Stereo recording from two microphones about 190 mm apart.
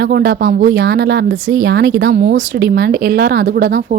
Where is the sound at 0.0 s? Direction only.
55° right (ahead or behind).